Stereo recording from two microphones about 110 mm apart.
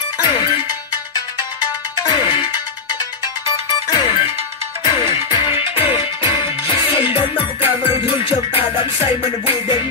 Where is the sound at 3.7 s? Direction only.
40° left (ahead or behind).